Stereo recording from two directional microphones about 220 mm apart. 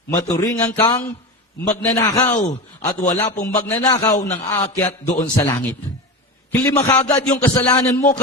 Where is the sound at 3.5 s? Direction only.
25° left (ahead or behind).